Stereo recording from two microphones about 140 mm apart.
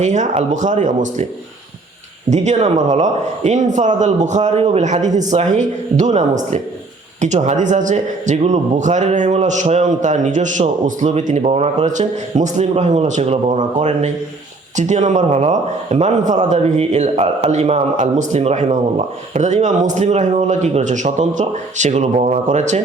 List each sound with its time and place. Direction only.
0.0 s speech: 55° right (ahead or behind)
2.3 s speech: 55° right (ahead or behind)
11.4 s speech: 45° right (ahead or behind)